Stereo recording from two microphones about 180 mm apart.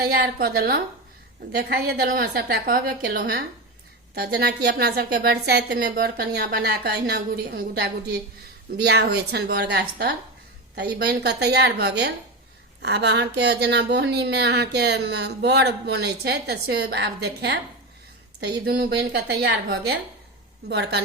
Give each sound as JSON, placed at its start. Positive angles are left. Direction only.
{"t": 0.0, "sound": "a woman's voice", "side_deg": -55}